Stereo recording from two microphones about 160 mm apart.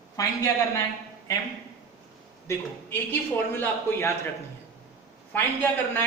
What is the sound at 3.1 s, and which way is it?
Speech, 15° left (ahead or behind).